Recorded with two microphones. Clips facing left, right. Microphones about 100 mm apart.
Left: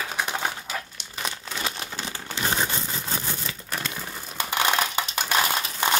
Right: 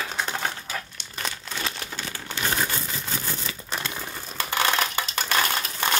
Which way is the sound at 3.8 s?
Centre (ahead or behind).